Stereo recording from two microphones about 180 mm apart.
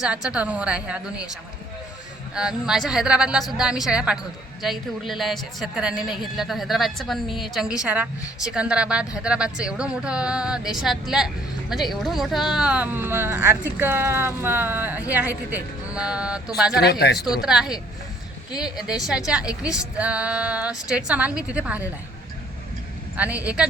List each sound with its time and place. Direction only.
0.0 s speech: 5° right (ahead or behind)
2.3 s speech: 5° right (ahead or behind)
16.8 s speech: 65° left (ahead or behind)
17.4 s speech: 5° right (ahead or behind)
23.1 s speech: 10° right (ahead or behind)